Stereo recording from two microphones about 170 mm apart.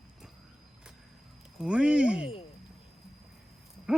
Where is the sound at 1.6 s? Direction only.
5° right (ahead or behind).